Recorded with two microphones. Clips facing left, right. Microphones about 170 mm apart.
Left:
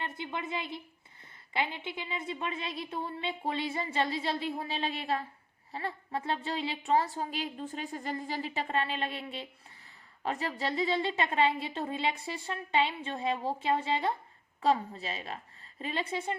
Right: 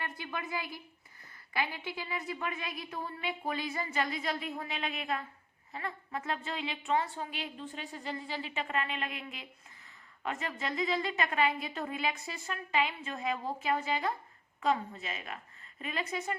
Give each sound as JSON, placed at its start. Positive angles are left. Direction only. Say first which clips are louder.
{"t": 0.0, "sound": "a woman's voice", "louder": "left 2 dB", "side_deg": 25}